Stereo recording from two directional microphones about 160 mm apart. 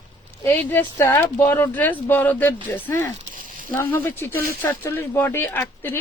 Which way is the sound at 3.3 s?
60° right (ahead or behind).